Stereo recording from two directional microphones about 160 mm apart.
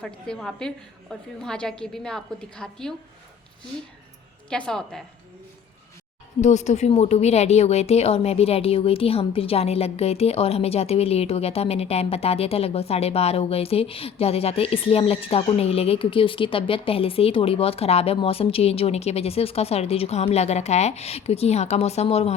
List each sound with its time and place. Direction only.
0.0 s a woman's voice: 5° left (ahead or behind)
4.4 s a woman's voice: 5° left (ahead or behind)
6.4 s a woman's voice: 45° left (ahead or behind)